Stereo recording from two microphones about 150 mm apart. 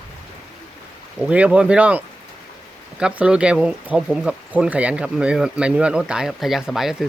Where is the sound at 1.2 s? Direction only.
10° right (ahead or behind).